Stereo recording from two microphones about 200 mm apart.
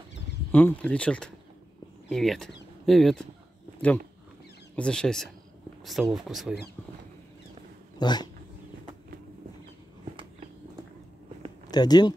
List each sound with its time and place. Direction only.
0.5 s speech: 5° left (ahead or behind)
4.7 s speech: 5° left (ahead or behind)
8.0 s speech: 20° left (ahead or behind)
11.7 s speech: 20° left (ahead or behind)